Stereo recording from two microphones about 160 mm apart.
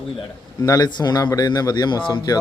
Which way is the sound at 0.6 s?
25° left (ahead or behind).